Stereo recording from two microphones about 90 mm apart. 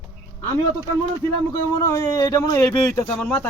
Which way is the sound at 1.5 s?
40° left (ahead or behind).